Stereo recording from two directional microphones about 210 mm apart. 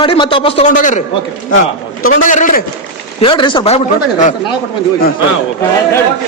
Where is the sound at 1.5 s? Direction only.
70° left (ahead or behind).